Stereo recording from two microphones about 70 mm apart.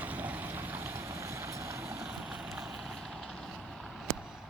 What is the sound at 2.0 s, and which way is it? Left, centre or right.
Vehicle, centre.